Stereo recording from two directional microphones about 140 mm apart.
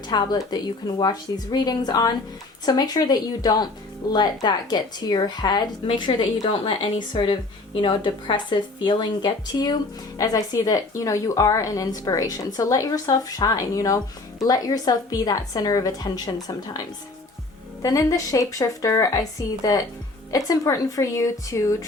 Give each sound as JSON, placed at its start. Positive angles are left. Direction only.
{"t": 0.1, "sound": "a woman's voice", "side_deg": 30}
{"t": 17.8, "sound": "speech", "side_deg": 25}